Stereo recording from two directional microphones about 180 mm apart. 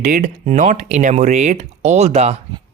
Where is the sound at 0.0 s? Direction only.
45° right (ahead or behind).